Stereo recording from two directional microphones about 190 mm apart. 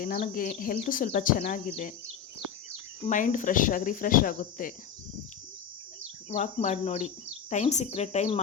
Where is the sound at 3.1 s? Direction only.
40° left (ahead or behind).